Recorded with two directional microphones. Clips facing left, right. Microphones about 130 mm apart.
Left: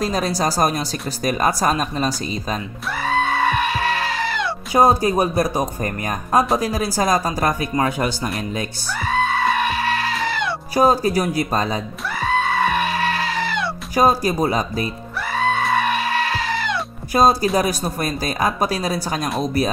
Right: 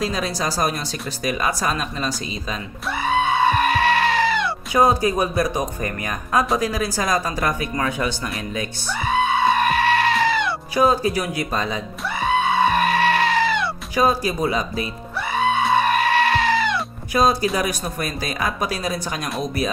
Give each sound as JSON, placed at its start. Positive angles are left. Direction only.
{"t": 0.0, "sound": "speech", "side_deg": 40}
{"t": 3.0, "sound": "goat", "side_deg": -5}
{"t": 4.7, "sound": "speech", "side_deg": 35}
{"t": 9.0, "sound": "music", "side_deg": -5}
{"t": 10.7, "sound": "speech", "side_deg": 40}
{"t": 12.2, "sound": "goat", "side_deg": -5}
{"t": 13.9, "sound": "speech", "side_deg": 40}
{"t": 15.3, "sound": "music", "side_deg": -5}
{"t": 17.1, "sound": "speech", "side_deg": 40}